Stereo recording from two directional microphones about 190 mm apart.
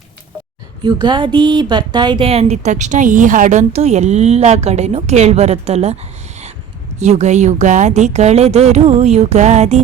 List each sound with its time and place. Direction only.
0.8 s a woman's voice: 20° right (ahead or behind)
7.0 s a woman's voice: 35° right (ahead or behind)